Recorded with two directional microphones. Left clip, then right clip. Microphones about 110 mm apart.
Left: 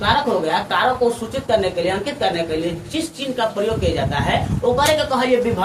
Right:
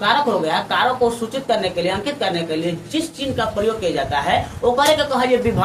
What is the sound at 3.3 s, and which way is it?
A woman's voice, 35° right (ahead or behind).